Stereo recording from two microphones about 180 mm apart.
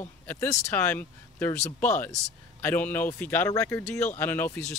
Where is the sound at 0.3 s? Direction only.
15° left (ahead or behind).